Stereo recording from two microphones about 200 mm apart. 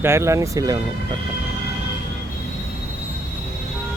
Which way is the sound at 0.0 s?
15° right (ahead or behind).